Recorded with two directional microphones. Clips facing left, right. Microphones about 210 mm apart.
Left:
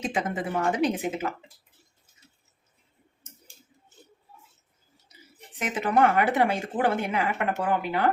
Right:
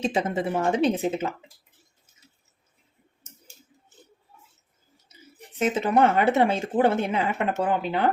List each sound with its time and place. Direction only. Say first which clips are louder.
0.0 s a woman's voice: right 4 dB; 25° right (ahead or behind)
5.5 s a woman's voice: right 3 dB; 25° right (ahead or behind)